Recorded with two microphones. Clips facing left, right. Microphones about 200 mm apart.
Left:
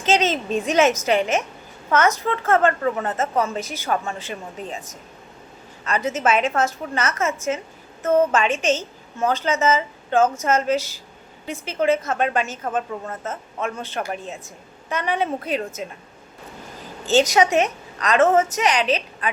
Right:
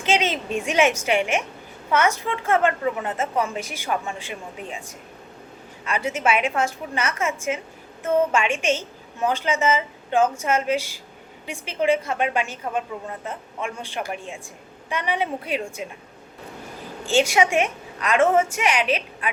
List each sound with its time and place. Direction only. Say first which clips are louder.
0.1 s a woman's voice: left 3 dB; 10° right (ahead or behind)
5.8 s a woman's voice: left 2 dB; 10° right (ahead or behind)
17.3 s a woman's voice: left 2 dB; 10° right (ahead or behind)